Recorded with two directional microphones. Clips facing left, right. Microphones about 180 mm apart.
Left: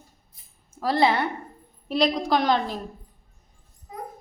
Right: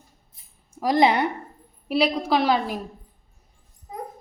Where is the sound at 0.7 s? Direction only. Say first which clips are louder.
Right 2 dB; 15° right (ahead or behind).